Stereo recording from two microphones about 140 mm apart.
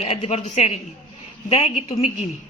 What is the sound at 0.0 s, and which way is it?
Speech, 45° left (ahead or behind).